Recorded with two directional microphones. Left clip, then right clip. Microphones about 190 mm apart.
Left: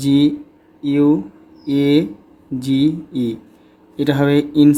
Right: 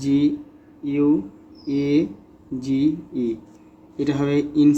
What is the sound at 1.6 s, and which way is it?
Speech, 45° left (ahead or behind).